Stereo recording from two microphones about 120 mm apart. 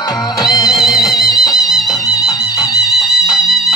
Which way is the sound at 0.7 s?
Centre (ahead or behind).